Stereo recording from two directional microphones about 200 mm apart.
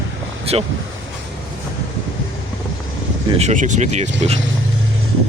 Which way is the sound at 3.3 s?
35° right (ahead or behind).